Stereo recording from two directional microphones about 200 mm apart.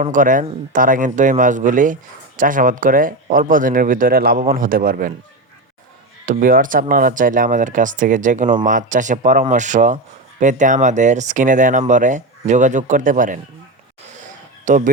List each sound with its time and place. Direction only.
0.0 s a man's voice: 40° right (ahead or behind)
6.2 s a man's voice: 45° right (ahead or behind)
14.6 s music: 40° right (ahead or behind)